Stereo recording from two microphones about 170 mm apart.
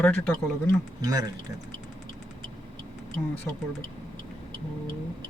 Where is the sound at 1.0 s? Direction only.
20° right (ahead or behind).